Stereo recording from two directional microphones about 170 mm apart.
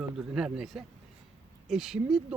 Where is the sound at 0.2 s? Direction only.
5° right (ahead or behind).